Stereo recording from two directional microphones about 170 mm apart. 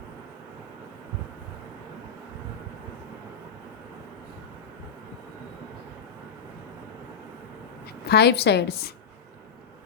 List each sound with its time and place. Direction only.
8.0 s a woman's voice: 75° left (ahead or behind)